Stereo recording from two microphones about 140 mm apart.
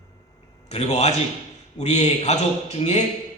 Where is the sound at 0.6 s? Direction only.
50° left (ahead or behind).